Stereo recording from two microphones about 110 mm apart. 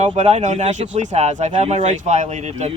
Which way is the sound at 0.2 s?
90° right.